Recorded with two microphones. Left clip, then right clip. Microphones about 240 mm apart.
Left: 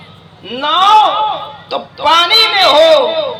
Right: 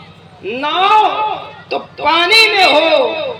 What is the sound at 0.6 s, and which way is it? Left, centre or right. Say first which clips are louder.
A woman's voice: left 3 dB; centre.